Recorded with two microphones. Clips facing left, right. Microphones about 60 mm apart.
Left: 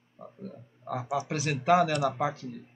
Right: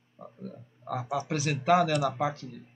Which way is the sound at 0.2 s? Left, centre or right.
Centre.